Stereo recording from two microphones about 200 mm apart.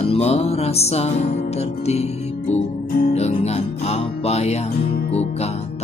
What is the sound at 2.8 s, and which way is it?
Music, 50° left (ahead or behind).